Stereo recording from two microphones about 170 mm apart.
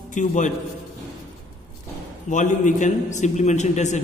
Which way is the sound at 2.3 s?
50° left (ahead or behind).